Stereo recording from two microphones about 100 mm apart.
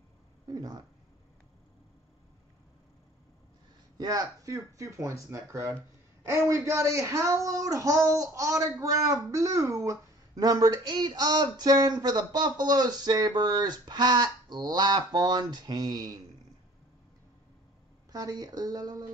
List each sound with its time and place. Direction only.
0.5 s speech: 40° right (ahead or behind)
4.0 s speech: 40° right (ahead or behind)
18.1 s speech: 40° right (ahead or behind)